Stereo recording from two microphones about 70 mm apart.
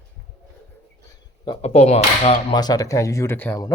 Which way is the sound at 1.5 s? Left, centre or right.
Left.